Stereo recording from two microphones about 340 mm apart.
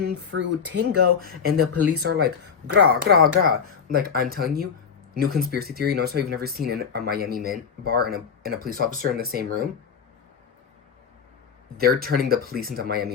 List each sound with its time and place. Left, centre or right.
0.0 s speech: right
11.8 s speech: right